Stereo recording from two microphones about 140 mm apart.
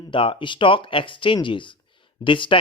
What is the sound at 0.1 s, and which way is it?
Speech, 40° left (ahead or behind).